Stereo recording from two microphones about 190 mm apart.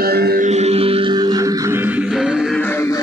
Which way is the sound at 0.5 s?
35° right (ahead or behind).